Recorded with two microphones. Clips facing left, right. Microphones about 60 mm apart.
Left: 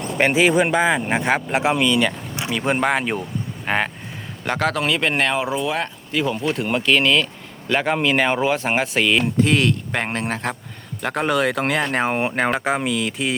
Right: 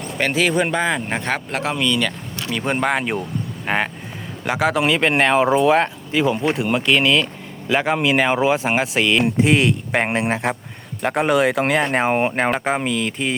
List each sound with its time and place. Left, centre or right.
0.2 s speech: centre
0.5 s speech: centre
2.6 s speech: centre
5.6 s speech: right
6.1 s speech: centre
9.2 s speech: centre